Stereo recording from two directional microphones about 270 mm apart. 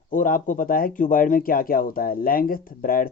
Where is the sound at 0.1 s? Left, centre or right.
Left.